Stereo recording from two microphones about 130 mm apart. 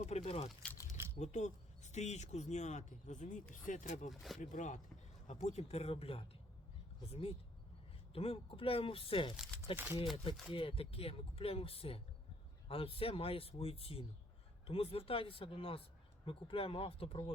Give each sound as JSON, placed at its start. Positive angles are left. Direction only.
{"t": 0.2, "sound": "speech", "side_deg": 50}
{"t": 0.6, "sound": "keys jangling", "side_deg": 10}
{"t": 1.2, "sound": "speech", "side_deg": 65}
{"t": 4.1, "sound": "speech", "side_deg": 0}
{"t": 4.4, "sound": "speech", "side_deg": 75}
{"t": 5.3, "sound": "speech", "side_deg": 60}
{"t": 9.7, "sound": "speech", "side_deg": -15}
{"t": 10.5, "sound": "speech", "side_deg": 40}